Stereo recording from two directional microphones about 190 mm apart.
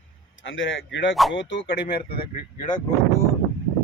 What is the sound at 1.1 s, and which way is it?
Speech, centre (ahead or behind).